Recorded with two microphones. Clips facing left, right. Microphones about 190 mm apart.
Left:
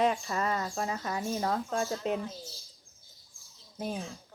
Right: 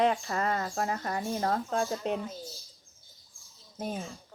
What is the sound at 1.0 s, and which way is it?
Speech, 40° right (ahead or behind).